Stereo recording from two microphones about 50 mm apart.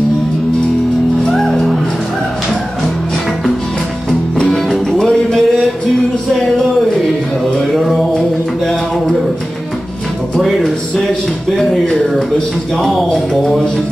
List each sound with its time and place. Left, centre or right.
1.4 s music: centre
4.1 s music: centre
7.7 s music: centre
10.4 s music: centre
12.8 s speech: centre